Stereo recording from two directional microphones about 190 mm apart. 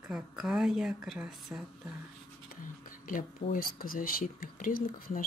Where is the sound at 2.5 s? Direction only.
45° left (ahead or behind).